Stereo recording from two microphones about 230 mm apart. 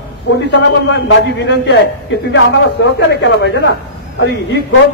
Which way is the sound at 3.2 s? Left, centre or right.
Left.